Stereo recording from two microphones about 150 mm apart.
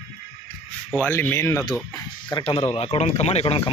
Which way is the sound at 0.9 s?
10° left (ahead or behind).